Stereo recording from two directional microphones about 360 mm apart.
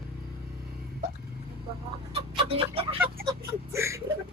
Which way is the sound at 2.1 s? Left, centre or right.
Centre.